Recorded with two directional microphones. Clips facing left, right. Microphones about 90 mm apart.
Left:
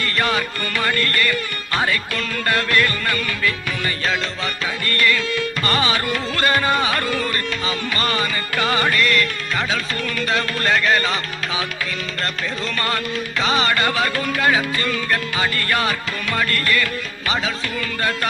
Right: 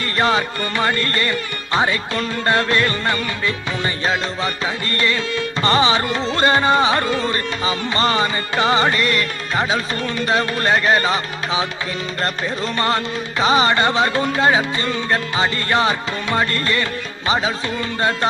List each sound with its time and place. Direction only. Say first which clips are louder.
0.0 s music: right 3 dB; 25° right (ahead or behind)
9.6 s speech: right 4 dB; 35° right (ahead or behind)
12.7 s music: right 5 dB; 25° right (ahead or behind)
13.4 s speech: right 5 dB; 35° right (ahead or behind)
13.7 s music: right 3 dB; 25° right (ahead or behind)